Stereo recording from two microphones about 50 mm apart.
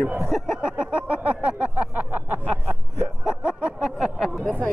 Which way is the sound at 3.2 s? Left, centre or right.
Centre.